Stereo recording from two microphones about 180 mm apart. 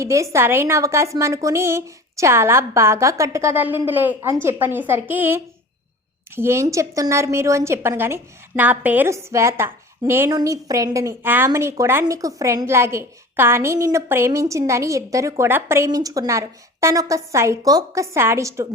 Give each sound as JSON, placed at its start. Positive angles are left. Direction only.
{"t": 0.0, "sound": "a woman's voice", "side_deg": -15}